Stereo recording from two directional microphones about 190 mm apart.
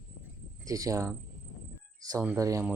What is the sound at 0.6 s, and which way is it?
Speech, 20° right (ahead or behind).